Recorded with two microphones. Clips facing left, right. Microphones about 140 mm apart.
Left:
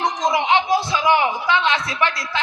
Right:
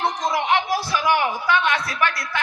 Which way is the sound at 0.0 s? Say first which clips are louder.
Left 2 dB; 20° left (ahead or behind).